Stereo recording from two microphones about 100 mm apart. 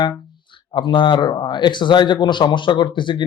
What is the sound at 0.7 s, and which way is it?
Speech, 55° left (ahead or behind).